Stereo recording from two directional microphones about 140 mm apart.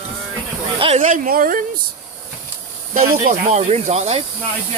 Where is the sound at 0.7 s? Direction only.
40° right (ahead or behind).